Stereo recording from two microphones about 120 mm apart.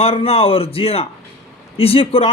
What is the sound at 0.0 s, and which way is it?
A man's voice, 55° left (ahead or behind).